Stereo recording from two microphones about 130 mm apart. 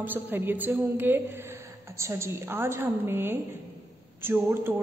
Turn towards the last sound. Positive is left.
turn(degrees=-15)  # may be behind; listen again after turning